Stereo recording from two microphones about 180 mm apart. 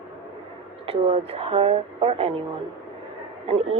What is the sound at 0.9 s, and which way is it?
A woman's voice, 35° right (ahead or behind).